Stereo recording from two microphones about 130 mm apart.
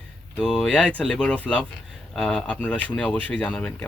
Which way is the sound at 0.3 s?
Centre (ahead or behind).